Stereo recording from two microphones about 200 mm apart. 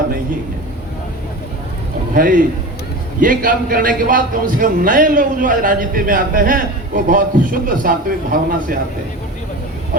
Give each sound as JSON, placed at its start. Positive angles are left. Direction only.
{"t": 2.1, "sound": "a man's voice", "side_deg": -45}